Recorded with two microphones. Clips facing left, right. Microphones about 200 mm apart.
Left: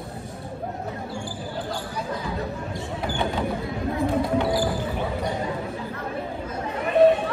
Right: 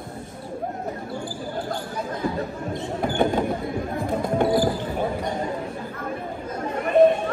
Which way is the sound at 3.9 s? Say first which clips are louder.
Left 1 dB; 50° right (ahead or behind).